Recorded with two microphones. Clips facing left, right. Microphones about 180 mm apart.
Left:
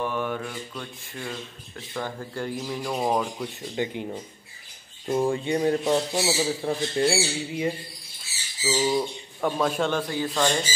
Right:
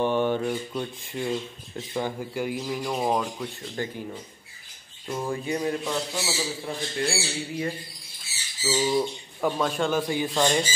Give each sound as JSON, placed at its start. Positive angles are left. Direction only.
{"t": 0.0, "sound": "speech", "side_deg": -30}
{"t": 1.2, "sound": "speech", "side_deg": -15}
{"t": 2.9, "sound": "speech", "side_deg": 0}
{"t": 3.7, "sound": "squawk", "side_deg": 15}
{"t": 5.1, "sound": "a man's voice", "side_deg": 30}
{"t": 7.1, "sound": "a man's voice", "side_deg": 20}
{"t": 8.6, "sound": "squawk", "side_deg": 10}
{"t": 9.4, "sound": "speech", "side_deg": 0}
{"t": 9.9, "sound": "speech", "side_deg": -15}